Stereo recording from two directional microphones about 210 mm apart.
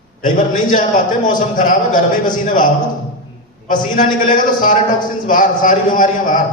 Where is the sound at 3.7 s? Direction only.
40° left (ahead or behind).